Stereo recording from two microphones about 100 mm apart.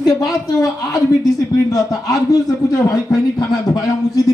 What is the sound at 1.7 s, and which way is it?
A man's voice, 35° left (ahead or behind).